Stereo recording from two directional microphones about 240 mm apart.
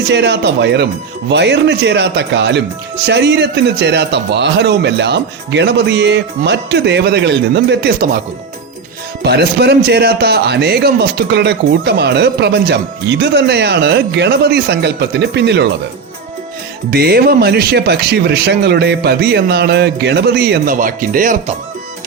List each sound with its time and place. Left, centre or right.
0.1 s speech: right
9.2 s speech: right
16.9 s speech: right